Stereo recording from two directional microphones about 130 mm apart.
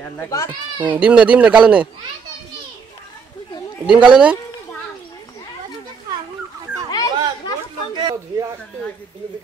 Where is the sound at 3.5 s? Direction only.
35° left (ahead or behind).